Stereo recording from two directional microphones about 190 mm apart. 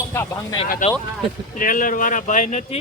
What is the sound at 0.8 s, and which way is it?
Speech, 40° left (ahead or behind).